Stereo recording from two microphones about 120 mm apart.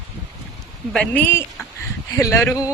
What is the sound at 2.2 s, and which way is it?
Speech, 25° left (ahead or behind).